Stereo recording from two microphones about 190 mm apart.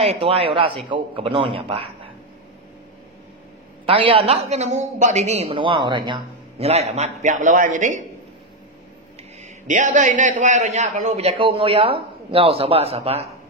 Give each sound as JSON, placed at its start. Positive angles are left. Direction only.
{"t": 0.0, "sound": "a man's voice", "side_deg": -30}
{"t": 3.8, "sound": "a man's voice", "side_deg": -30}
{"t": 9.4, "sound": "a man's voice", "side_deg": -40}